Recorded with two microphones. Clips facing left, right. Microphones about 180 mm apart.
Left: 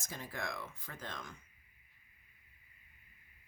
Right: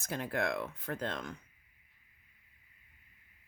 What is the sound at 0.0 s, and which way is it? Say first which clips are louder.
Speech: right 9 dB; 60° right (ahead or behind).